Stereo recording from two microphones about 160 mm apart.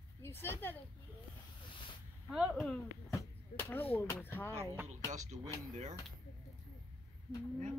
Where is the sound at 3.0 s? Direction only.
15° left (ahead or behind).